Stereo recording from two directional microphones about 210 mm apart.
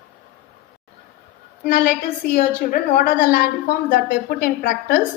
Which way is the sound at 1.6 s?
40° left (ahead or behind).